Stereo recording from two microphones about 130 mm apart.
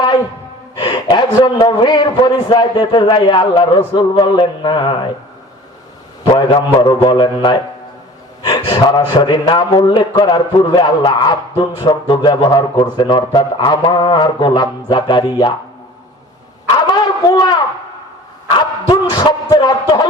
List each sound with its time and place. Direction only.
0.8 s a man's voice: 40° left (ahead or behind)
6.3 s a man's voice: 30° left (ahead or behind)
8.6 s a man's voice: 35° left (ahead or behind)
16.8 s a sound: 30° left (ahead or behind)
18.5 s speech: 35° left (ahead or behind)